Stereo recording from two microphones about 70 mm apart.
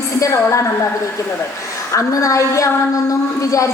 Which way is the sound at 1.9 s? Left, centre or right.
Left.